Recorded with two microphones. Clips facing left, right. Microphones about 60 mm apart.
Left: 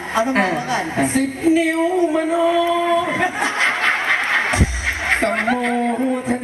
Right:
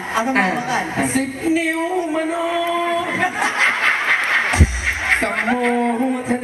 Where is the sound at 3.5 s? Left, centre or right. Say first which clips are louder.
Right 1 dB; right.